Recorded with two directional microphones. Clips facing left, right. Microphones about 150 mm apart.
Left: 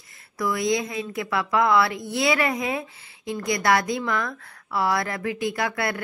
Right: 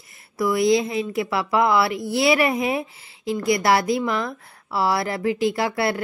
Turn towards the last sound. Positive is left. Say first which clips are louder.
# right 4 dB
turn(degrees=-30)  # may be behind; listen again after turning